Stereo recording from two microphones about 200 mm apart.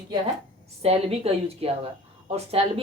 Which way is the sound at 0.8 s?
30° right (ahead or behind).